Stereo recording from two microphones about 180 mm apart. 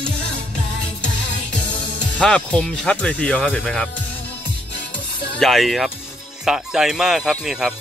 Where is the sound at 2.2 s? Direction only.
5° left (ahead or behind).